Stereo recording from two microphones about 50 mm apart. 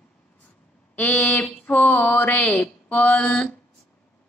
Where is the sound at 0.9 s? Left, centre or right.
Left.